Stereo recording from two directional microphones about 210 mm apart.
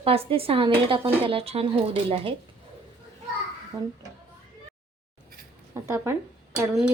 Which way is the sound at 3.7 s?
15° right (ahead or behind).